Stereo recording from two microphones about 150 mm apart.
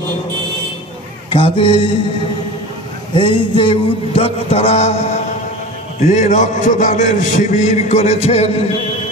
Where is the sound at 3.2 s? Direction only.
35° left (ahead or behind).